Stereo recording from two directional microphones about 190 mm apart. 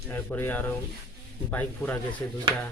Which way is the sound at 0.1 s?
10° left (ahead or behind).